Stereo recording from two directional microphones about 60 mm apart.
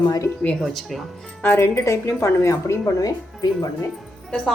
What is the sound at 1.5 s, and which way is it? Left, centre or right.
A woman's voice, left.